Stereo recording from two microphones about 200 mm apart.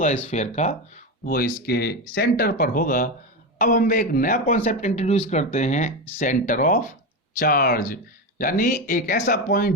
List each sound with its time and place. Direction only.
0.3 s speech: 35° left (ahead or behind)
1.2 s speech: 50° left (ahead or behind)